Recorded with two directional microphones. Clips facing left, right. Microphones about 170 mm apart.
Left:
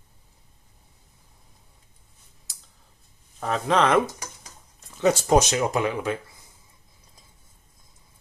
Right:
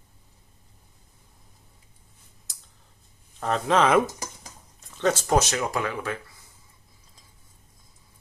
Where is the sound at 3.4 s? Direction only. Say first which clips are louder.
Even; centre (ahead or behind).